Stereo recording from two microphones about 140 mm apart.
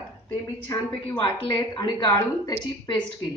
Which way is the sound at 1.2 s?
35° left (ahead or behind).